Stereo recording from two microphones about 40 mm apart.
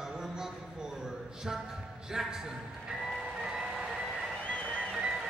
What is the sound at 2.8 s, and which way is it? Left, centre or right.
Music, centre.